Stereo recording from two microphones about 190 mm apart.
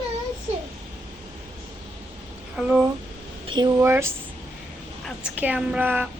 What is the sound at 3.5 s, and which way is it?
Speech, 25° right (ahead or behind).